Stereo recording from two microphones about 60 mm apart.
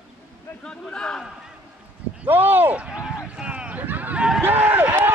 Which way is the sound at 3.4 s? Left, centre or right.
Centre.